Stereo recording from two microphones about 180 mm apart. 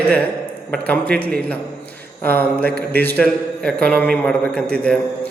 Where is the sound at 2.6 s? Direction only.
55° right (ahead or behind).